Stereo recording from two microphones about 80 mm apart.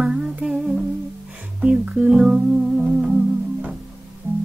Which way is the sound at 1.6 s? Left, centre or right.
Centre.